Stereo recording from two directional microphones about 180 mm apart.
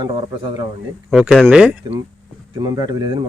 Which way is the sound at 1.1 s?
5° right (ahead or behind).